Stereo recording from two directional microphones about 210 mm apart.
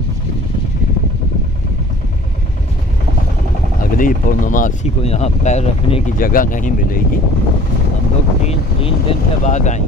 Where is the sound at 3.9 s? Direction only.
40° left (ahead or behind).